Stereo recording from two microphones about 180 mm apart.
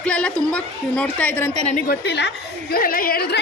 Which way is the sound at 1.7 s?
50° left (ahead or behind).